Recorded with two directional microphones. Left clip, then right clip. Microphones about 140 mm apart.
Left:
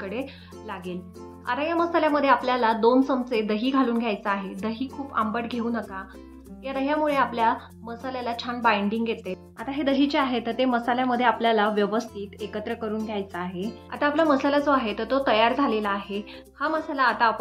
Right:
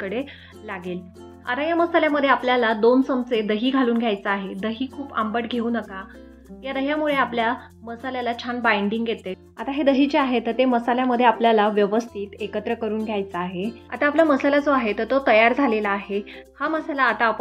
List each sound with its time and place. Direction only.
0.0 s a woman's voice: 25° right (ahead or behind)